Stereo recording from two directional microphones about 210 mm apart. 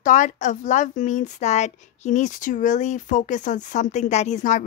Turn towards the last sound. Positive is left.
turn(degrees=35)  # may be behind; listen again after turning